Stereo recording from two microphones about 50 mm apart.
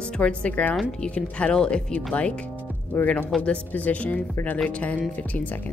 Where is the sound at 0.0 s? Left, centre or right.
Centre.